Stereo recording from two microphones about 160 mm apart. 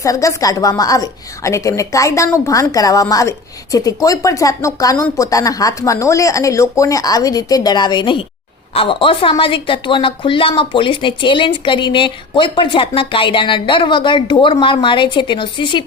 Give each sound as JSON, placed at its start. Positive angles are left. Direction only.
{"t": 0.0, "sound": "a woman's voice", "side_deg": 20}